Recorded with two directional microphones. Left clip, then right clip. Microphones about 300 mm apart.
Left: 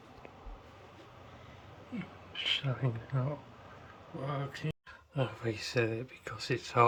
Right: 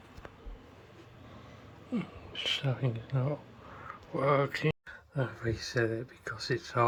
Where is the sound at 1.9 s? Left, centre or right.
Centre.